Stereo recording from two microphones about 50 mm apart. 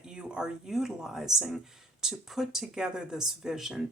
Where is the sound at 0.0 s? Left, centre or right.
Centre.